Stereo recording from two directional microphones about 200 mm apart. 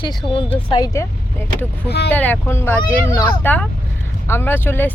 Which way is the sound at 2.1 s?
10° left (ahead or behind).